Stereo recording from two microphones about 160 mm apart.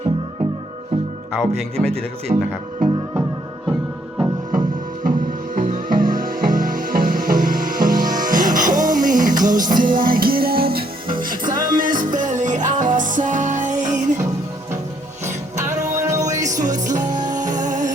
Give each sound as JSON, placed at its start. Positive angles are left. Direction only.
{"t": 1.4, "sound": "speech", "side_deg": 5}
{"t": 2.3, "sound": "speech", "side_deg": -30}
{"t": 4.5, "sound": "music", "side_deg": -60}
{"t": 16.0, "sound": "music", "side_deg": -20}
{"t": 16.6, "sound": "music", "side_deg": -50}